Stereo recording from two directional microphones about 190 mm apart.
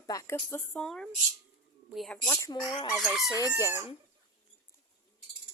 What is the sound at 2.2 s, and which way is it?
Speech, 15° left (ahead or behind).